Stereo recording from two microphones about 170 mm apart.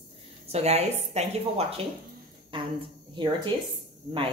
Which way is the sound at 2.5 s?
30° right (ahead or behind).